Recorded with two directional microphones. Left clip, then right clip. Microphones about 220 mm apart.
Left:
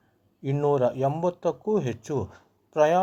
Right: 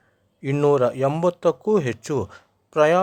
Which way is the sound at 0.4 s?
30° right (ahead or behind).